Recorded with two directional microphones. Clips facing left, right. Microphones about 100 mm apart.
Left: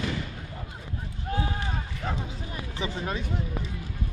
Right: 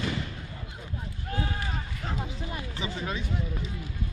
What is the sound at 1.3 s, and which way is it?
Run, 30° left (ahead or behind).